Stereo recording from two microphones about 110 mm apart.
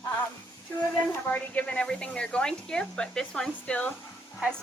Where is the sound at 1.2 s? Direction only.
15° left (ahead or behind).